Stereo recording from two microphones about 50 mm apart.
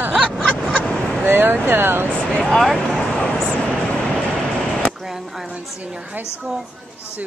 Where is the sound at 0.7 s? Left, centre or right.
Left.